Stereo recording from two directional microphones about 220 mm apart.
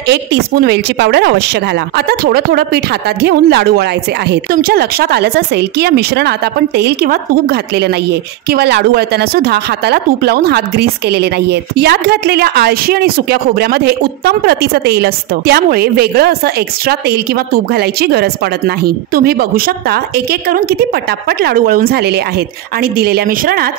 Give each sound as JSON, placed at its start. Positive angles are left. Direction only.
{"t": 0.1, "sound": "a woman's voice", "side_deg": -50}
{"t": 17.7, "sound": "a woman's voice", "side_deg": -45}
{"t": 21.3, "sound": "a woman's voice", "side_deg": -45}